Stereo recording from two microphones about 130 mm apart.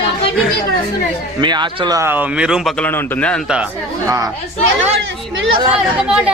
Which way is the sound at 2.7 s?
15° left (ahead or behind).